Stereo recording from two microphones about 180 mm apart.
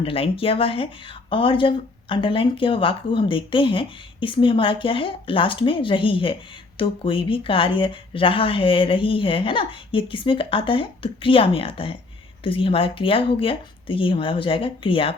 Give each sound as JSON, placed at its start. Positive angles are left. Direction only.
{"t": 0.0, "sound": "speech", "side_deg": 30}